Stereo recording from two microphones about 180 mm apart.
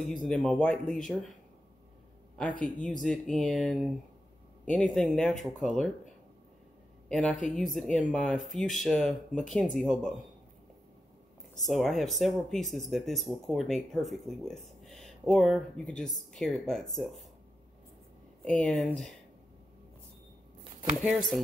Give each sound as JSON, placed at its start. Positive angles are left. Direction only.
{"t": 0.0, "sound": "speech", "side_deg": 0}
{"t": 2.6, "sound": "speech", "side_deg": 5}
{"t": 7.1, "sound": "a woman's voice", "side_deg": 5}
{"t": 11.6, "sound": "speech", "side_deg": 0}
{"t": 18.4, "sound": "speech", "side_deg": 5}